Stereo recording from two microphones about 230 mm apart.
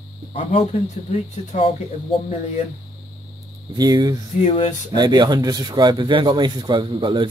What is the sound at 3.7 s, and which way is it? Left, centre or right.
Speech, centre.